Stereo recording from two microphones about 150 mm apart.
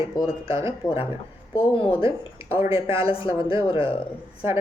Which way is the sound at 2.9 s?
35° left (ahead or behind).